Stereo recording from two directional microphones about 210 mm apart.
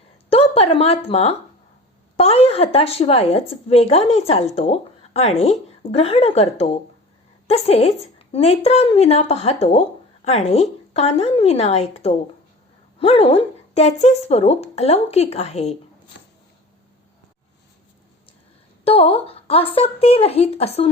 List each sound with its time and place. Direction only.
0.3 s a woman's voice: 30° left (ahead or behind)
18.9 s speech: 30° left (ahead or behind)